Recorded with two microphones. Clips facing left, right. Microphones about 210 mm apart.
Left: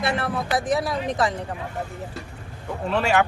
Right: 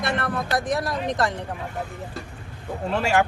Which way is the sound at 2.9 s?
60° left (ahead or behind).